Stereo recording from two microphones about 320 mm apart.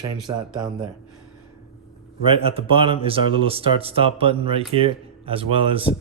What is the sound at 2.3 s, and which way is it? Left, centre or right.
Speech, centre.